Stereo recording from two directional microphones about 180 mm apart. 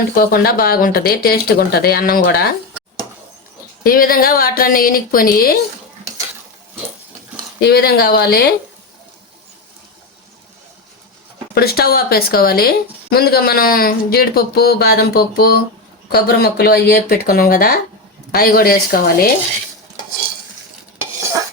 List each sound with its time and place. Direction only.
0.2 s speech: 55° left (ahead or behind)
3.8 s speech: 55° left (ahead or behind)
7.6 s speech: 60° left (ahead or behind)
11.5 s speech: 60° left (ahead or behind)